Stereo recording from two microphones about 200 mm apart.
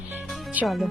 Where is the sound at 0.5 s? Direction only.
Centre (ahead or behind).